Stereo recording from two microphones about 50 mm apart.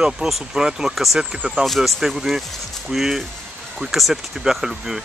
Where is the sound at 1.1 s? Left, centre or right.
Centre.